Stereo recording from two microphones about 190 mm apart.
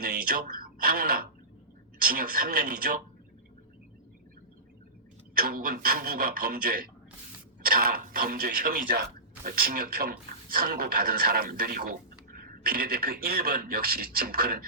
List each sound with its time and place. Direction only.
0.0 s speech: 50° right (ahead or behind)
5.3 s speech: 50° right (ahead or behind)